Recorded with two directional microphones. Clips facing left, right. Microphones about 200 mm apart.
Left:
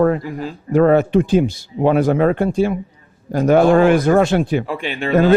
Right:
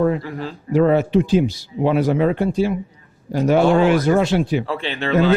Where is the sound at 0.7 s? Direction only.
50° left (ahead or behind).